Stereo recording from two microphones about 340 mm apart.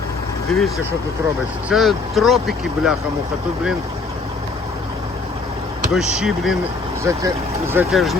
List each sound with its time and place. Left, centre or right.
0.5 s speech: centre
1.7 s speech: centre
5.9 s speech: centre